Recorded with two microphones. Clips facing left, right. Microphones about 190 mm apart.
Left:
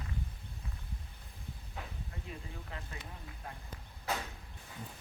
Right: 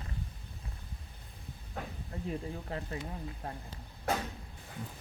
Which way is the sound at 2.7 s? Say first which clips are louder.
Right 8 dB; 35° right (ahead or behind).